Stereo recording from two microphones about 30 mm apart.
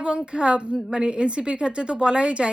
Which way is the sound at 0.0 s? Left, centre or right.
Right.